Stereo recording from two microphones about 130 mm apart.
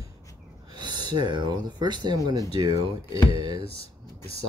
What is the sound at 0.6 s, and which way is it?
Speech, 35° right (ahead or behind).